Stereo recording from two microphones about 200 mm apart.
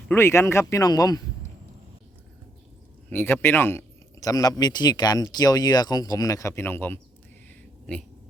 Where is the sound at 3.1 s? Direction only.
10° left (ahead or behind).